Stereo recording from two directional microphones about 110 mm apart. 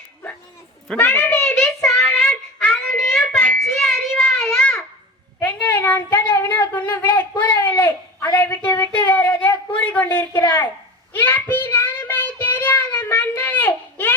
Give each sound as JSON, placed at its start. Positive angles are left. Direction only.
{"t": 0.9, "sound": "a child's voice", "side_deg": 20}
{"t": 1.8, "sound": "a sound", "side_deg": 5}
{"t": 2.0, "sound": "child singing", "side_deg": 10}
{"t": 5.4, "sound": "speech", "side_deg": 15}
{"t": 11.1, "sound": "child singing", "side_deg": 20}